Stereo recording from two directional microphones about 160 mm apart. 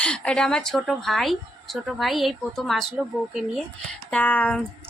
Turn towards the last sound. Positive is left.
turn(degrees=10)  # may be behind; listen again after turning